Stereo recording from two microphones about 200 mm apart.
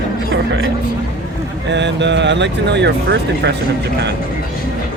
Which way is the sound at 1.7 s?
60° right (ahead or behind).